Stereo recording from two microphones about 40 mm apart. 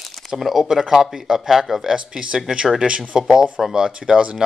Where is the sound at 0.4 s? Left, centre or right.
Centre.